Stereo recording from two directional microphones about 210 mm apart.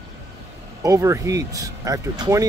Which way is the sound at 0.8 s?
15° right (ahead or behind).